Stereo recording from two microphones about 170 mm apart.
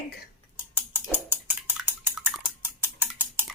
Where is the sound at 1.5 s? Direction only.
10° right (ahead or behind).